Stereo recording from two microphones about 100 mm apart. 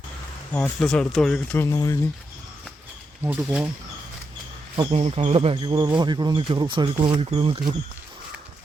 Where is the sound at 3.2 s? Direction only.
15° right (ahead or behind).